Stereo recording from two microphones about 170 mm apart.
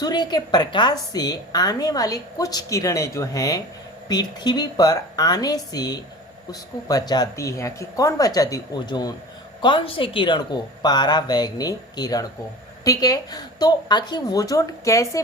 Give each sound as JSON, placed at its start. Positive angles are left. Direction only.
{"t": 0.0, "sound": "a woman's voice", "side_deg": 25}